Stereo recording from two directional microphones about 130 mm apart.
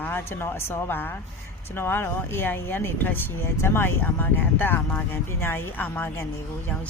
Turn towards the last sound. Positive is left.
turn(degrees=15)  # may be behind; listen again after turning